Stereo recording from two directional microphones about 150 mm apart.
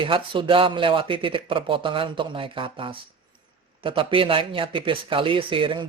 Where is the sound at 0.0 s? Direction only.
35° right (ahead or behind).